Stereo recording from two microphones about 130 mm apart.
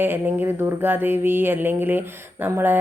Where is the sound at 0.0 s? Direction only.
15° right (ahead or behind).